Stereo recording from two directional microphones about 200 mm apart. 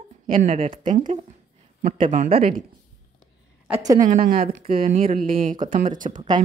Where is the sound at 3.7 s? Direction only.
20° right (ahead or behind).